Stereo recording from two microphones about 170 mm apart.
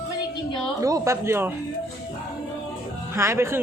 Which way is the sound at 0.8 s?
20° right (ahead or behind).